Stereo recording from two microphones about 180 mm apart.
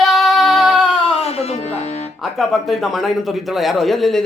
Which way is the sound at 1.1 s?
35° left (ahead or behind).